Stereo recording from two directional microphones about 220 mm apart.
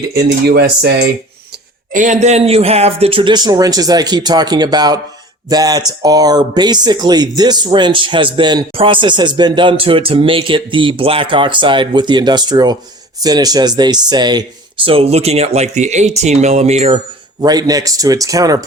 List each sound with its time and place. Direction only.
0.1 s cutlery: 45° right (ahead or behind)
1.9 s speech: 35° right (ahead or behind)
17.4 s speech: 15° right (ahead or behind)